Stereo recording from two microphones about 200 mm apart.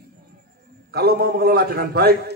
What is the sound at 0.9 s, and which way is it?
A man's voice, 50° right (ahead or behind).